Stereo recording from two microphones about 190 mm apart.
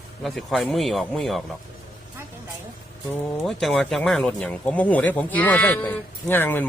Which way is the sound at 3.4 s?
Centre (ahead or behind).